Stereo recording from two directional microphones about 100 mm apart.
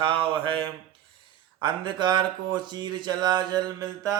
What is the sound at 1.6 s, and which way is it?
Speech, 50° right (ahead or behind).